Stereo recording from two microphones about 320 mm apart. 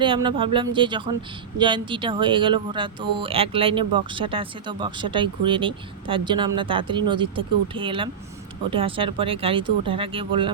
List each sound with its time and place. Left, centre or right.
0.0 s speech: centre